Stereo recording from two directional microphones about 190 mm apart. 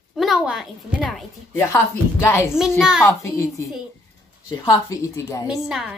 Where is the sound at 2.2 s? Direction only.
10° left (ahead or behind).